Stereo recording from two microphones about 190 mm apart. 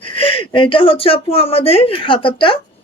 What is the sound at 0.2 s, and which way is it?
Speech, 30° left (ahead or behind).